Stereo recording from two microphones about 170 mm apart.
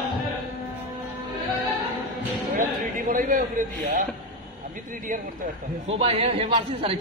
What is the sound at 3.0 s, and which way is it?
A man's voice, 50° right (ahead or behind).